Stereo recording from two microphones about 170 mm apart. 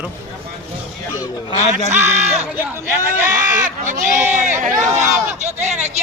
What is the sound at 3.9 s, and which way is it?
Speech, 45° right (ahead or behind).